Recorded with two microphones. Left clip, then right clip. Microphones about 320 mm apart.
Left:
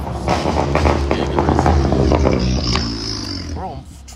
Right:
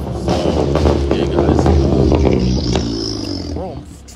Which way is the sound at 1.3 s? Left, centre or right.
Left.